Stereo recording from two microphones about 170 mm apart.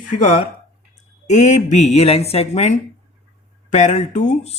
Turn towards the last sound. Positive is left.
turn(degrees=40)  # may be behind; listen again after turning